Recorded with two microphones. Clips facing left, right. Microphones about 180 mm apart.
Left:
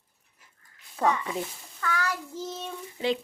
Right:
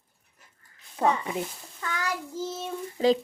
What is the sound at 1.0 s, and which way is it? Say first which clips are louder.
Speech: right 1 dB; 25° right (ahead or behind).